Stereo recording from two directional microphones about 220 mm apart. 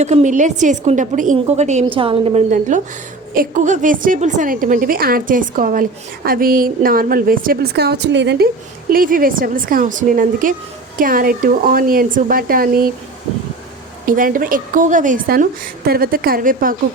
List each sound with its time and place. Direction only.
0.0 s a woman's voice: 30° right (ahead or behind); by 8.4 s 50° right (ahead or behind)
8.9 s a woman's voice: 40° right (ahead or behind)
14.0 s a woman's voice: 40° right (ahead or behind)